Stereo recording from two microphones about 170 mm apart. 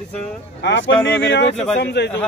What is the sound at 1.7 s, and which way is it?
Speech, 85° left.